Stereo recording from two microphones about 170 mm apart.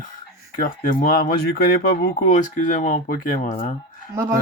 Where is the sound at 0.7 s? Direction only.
55° left (ahead or behind).